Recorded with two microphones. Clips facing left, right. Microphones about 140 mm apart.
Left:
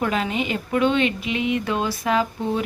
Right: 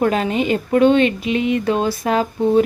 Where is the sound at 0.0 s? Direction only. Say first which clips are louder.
Right 6 dB; 40° right (ahead or behind).